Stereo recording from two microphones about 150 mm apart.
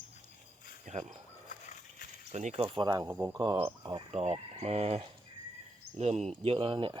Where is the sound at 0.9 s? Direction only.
50° right (ahead or behind).